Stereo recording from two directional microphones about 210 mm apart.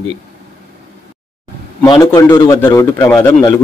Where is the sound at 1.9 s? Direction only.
20° left (ahead or behind).